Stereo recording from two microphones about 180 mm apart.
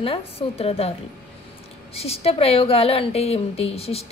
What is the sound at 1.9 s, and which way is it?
A woman's voice, 35° left (ahead or behind).